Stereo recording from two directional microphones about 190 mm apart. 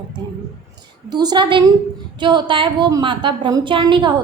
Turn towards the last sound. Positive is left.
turn(degrees=-25)  # may be behind; listen again after turning